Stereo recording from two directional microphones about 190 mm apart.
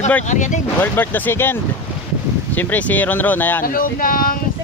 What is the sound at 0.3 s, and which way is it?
Speech, 40° left (ahead or behind).